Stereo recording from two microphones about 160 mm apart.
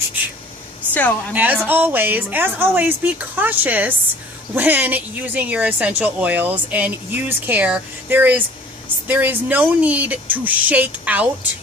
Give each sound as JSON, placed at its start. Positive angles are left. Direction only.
{"t": 1.3, "sound": "a woman's voice", "side_deg": -10}